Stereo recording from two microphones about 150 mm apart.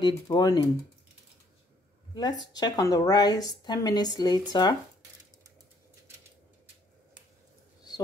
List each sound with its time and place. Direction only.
0.0 s a woman's voice: 25° left (ahead or behind)
2.1 s a woman's voice: 25° left (ahead or behind)